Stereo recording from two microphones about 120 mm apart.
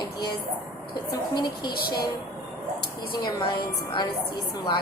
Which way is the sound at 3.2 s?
35° left (ahead or behind).